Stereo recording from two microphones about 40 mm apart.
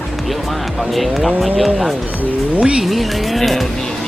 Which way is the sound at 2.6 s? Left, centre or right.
Right.